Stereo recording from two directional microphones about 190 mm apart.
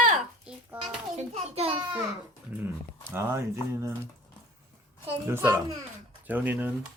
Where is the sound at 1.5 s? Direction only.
30° right (ahead or behind).